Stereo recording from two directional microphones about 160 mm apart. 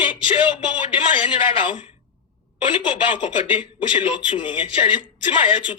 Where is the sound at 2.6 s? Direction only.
30° left (ahead or behind).